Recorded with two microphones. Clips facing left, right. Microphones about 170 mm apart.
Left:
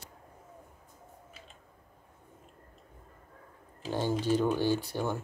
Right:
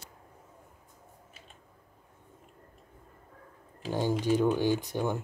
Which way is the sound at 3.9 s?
15° right (ahead or behind).